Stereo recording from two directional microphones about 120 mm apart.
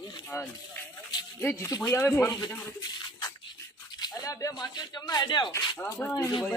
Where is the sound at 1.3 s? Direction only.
20° left (ahead or behind).